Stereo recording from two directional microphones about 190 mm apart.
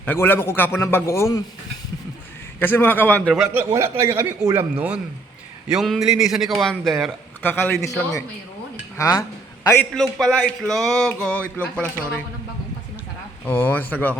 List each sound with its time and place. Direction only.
0.0 s a man's voice: 10° left (ahead or behind)
2.6 s a man's voice: 10° left (ahead or behind); by 4.6 s 15° right (ahead or behind)
4.7 s a sound: 5° right (ahead or behind)
7.4 s a man's voice: 10° left (ahead or behind)
9.9 s a sound: 5° left (ahead or behind)
13.4 s a man's voice: 10° left (ahead or behind)